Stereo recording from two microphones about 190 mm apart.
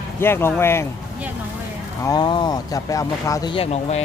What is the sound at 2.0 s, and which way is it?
Speech, 25° left (ahead or behind).